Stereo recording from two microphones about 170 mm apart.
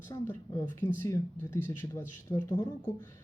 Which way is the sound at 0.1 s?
15° left (ahead or behind).